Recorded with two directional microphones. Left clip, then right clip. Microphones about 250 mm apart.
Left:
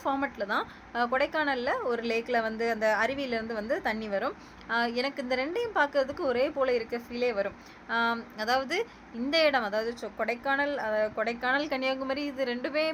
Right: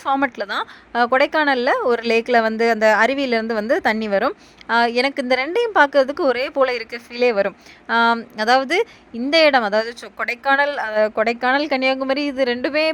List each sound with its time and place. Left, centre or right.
0.0 s a woman's voice: right